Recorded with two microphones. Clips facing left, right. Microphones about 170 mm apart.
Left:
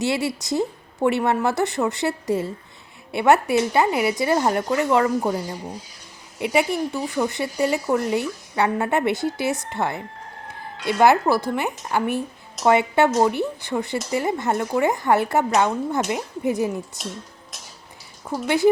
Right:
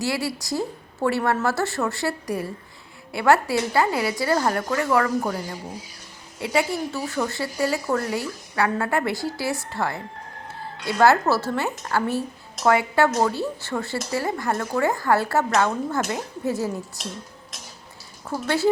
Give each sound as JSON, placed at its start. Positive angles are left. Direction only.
{"t": 0.0, "sound": "a woman's voice", "side_deg": 20}
{"t": 18.3, "sound": "a woman's voice", "side_deg": 15}